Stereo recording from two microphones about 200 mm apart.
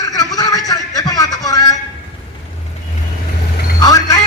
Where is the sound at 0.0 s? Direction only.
15° left (ahead or behind).